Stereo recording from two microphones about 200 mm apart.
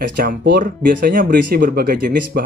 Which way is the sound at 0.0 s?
45° right (ahead or behind).